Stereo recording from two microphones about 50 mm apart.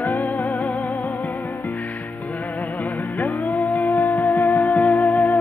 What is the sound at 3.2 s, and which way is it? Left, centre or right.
Music, left.